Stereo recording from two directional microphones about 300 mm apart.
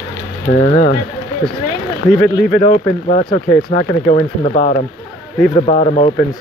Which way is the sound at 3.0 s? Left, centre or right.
Left.